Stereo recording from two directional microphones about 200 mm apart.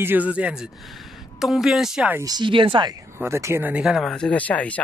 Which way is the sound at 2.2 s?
20° right (ahead or behind).